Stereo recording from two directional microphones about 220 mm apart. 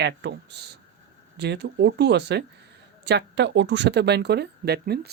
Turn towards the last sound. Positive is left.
turn(degrees=-45)  # may be behind; listen again after turning